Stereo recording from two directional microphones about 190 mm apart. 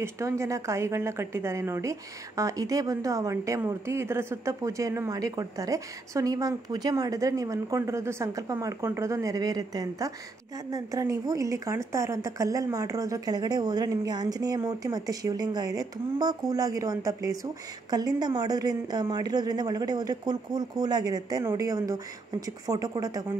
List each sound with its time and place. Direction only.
0.0 s a woman's voice: 15° right (ahead or behind)